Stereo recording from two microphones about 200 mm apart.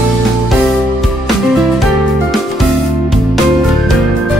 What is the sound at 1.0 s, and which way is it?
Music, centre (ahead or behind).